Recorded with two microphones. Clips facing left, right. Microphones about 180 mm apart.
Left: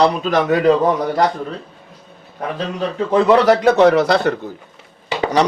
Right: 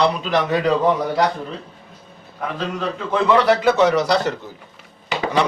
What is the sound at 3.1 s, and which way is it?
A man's voice, 40° left (ahead or behind).